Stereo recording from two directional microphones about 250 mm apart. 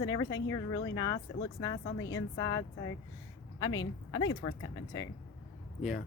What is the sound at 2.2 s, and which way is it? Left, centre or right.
A woman's voice, centre.